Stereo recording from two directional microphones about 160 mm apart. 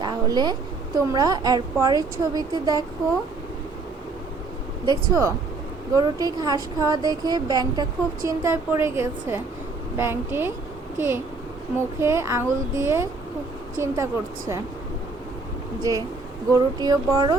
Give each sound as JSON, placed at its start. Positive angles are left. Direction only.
{"t": 0.0, "sound": "a sound", "side_deg": -25}
{"t": 0.9, "sound": "speech", "side_deg": -25}
{"t": 4.9, "sound": "a woman's voice", "side_deg": -20}
{"t": 15.8, "sound": "speech", "side_deg": -25}